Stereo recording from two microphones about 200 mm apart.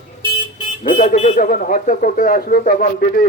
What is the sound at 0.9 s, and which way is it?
Speech, 40° left (ahead or behind).